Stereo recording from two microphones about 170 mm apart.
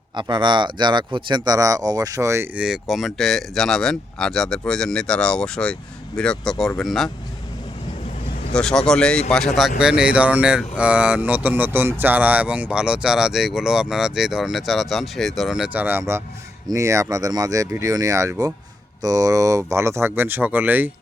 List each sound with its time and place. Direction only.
0.2 s speech: 25° right (ahead or behind)
2.6 s speech: 5° right (ahead or behind)
8.5 s speech: 5° left (ahead or behind)